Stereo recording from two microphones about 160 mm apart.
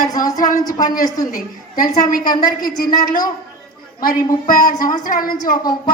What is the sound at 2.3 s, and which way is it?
Speech, 25° left (ahead or behind).